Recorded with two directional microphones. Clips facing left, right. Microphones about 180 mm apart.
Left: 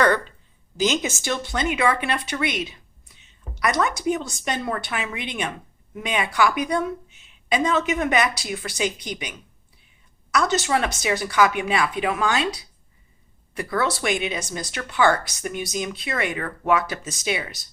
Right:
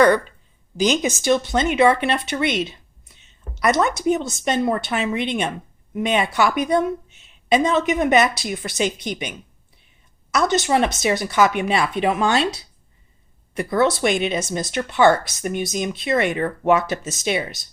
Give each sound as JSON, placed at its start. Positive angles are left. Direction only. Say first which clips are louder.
{"t": 0.8, "sound": "speech", "louder": "right 3 dB", "side_deg": -15}
{"t": 7.5, "sound": "speech", "louder": "right 4 dB", "side_deg": -20}
{"t": 10.3, "sound": "speech", "louder": "right 3 dB", "side_deg": -20}
{"t": 13.5, "sound": "speech", "louder": "right 6 dB", "side_deg": -20}